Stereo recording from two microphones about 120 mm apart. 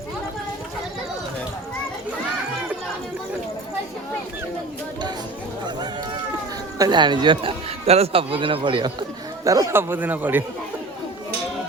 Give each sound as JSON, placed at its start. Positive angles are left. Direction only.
{"t": 6.7, "sound": "speech", "side_deg": -35}
{"t": 7.9, "sound": "speech", "side_deg": -55}